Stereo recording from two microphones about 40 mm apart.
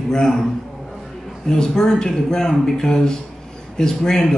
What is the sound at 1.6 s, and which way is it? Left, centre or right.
Speech, centre.